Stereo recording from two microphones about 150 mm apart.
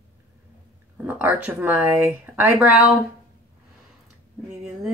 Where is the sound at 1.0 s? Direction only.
10° right (ahead or behind).